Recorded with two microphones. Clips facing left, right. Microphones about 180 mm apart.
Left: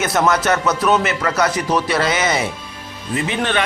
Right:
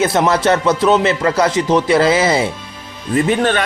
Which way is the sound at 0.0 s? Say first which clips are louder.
Right 3 dB; 30° right (ahead or behind).